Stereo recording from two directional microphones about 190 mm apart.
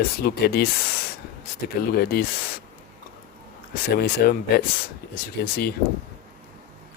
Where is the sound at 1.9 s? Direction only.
55° left (ahead or behind).